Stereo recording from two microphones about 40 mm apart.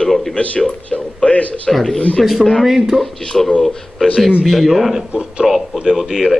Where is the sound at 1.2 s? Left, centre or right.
Left.